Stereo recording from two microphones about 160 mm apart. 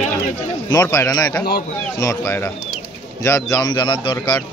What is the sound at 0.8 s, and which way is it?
A man's voice, 20° left (ahead or behind).